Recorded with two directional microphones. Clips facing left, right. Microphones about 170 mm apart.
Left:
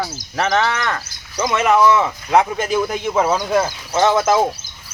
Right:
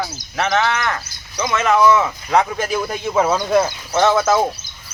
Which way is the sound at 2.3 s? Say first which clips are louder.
Left 2 dB; centre (ahead or behind).